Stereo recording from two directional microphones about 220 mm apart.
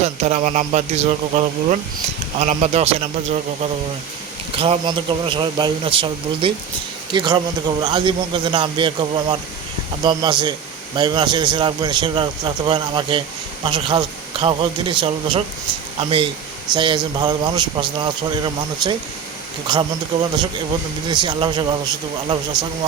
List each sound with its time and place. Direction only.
0.0 s a man's voice: 30° right (ahead or behind)
4.5 s a man's voice: 25° right (ahead or behind)
21.1 s a man's voice: 20° right (ahead or behind)